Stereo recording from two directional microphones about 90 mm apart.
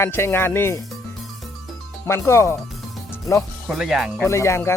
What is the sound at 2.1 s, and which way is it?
Speech, 30° left (ahead or behind).